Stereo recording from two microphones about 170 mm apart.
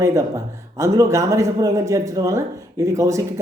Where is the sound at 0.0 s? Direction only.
15° right (ahead or behind).